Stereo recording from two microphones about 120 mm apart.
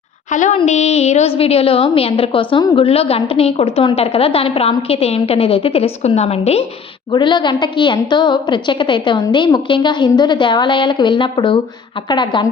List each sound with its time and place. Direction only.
0.3 s a woman's voice: 90° left
0.5 s a woman's voice: 65° left (ahead or behind)
7.1 s a woman's voice: 40° left (ahead or behind)